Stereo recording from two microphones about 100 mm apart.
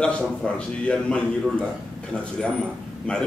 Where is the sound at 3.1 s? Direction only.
10° left (ahead or behind).